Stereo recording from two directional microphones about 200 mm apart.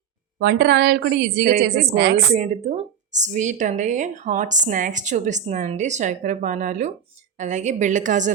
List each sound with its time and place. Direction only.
0.3 s a woman's voice: 50° right (ahead or behind)
2.3 s speech: 35° right (ahead or behind)